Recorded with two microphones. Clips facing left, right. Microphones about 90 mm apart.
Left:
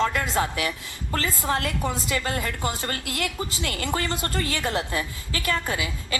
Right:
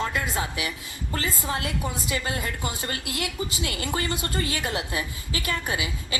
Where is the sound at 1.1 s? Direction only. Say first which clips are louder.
Left 3 dB; 65° left (ahead or behind).